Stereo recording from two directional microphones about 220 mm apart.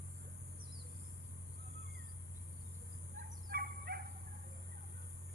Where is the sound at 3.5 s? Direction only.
45° right (ahead or behind).